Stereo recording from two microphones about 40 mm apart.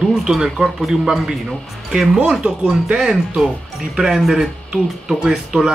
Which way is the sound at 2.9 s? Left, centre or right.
Centre.